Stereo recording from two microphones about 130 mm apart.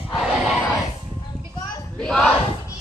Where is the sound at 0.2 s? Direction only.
5° right (ahead or behind).